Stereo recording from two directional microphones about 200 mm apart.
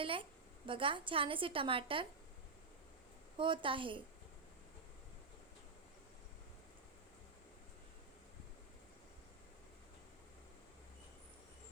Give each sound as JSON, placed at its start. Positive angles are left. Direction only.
{"t": 0.0, "sound": "a woman's voice", "side_deg": -25}
{"t": 3.3, "sound": "a woman's voice", "side_deg": -25}